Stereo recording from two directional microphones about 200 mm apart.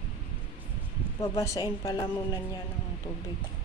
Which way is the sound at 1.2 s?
15° left (ahead or behind).